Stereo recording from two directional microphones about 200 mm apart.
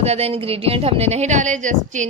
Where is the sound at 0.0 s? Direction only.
30° right (ahead or behind).